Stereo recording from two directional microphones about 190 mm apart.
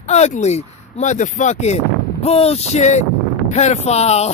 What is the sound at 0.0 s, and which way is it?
A man's voice, 35° left (ahead or behind).